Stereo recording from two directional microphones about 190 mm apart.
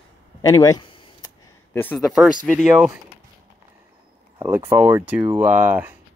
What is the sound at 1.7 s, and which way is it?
Speech, 10° left (ahead or behind).